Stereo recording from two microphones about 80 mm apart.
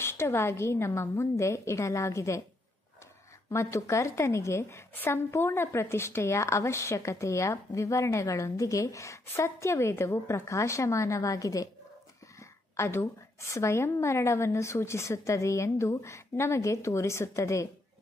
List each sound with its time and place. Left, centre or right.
0.0 s a woman's voice: left
3.4 s a woman's voice: left